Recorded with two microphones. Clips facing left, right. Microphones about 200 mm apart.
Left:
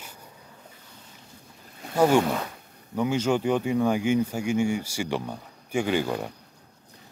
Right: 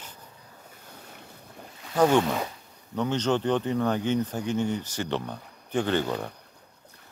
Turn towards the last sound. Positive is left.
turn(degrees=10)  # may be behind; listen again after turning